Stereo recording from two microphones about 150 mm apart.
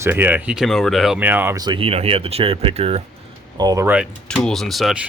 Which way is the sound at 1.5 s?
30° right (ahead or behind).